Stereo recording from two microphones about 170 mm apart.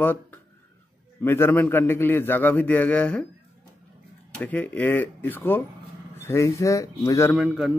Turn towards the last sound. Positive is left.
turn(degrees=-5)  # may be behind; listen again after turning